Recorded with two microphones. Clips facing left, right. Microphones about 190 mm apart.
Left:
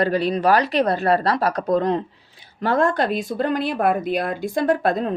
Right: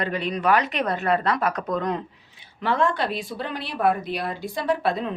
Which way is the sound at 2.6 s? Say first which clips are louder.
Left 4 dB; 45° left (ahead or behind).